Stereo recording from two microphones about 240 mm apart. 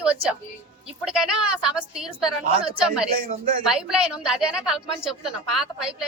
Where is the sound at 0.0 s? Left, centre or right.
Centre.